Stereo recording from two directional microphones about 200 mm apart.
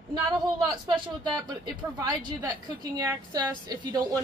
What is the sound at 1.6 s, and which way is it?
A woman's voice, 20° right (ahead or behind).